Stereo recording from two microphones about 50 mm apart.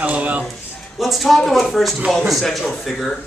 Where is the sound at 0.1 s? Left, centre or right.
Right.